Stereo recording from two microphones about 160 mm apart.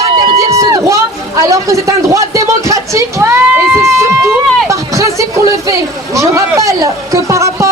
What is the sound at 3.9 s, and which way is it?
Run, 15° right (ahead or behind).